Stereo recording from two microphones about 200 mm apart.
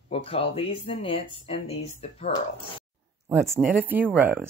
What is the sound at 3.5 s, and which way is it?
Speech, 10° right (ahead or behind).